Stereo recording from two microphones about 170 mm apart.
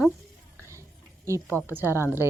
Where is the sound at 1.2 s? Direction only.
15° right (ahead or behind).